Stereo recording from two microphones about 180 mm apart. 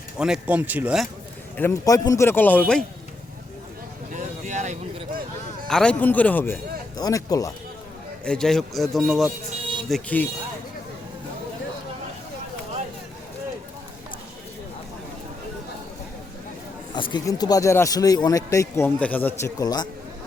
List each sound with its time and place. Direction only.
0.2 s speech: 5° right (ahead or behind)
1.5 s speech: 15° left (ahead or behind)
4.1 s a sound: 45° right (ahead or behind)
5.6 s speech: 5° left (ahead or behind)
8.2 s speech: 5° left (ahead or behind)
16.9 s speech: 25° left (ahead or behind)